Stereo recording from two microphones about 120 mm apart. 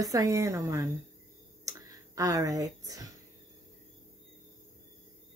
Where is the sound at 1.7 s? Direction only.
30° right (ahead or behind).